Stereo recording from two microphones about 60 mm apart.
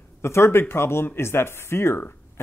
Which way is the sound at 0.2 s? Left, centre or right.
Left.